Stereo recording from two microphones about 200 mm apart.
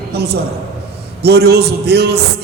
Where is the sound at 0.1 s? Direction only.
55° right (ahead or behind).